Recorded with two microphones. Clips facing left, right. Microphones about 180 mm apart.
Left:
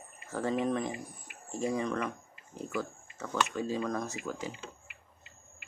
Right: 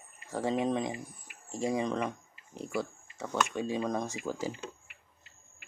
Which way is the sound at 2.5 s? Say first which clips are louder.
Right 1 dB; 75° right (ahead or behind).